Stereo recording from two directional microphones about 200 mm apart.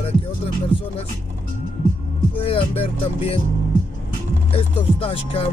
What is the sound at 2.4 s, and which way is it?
Music, 30° left (ahead or behind).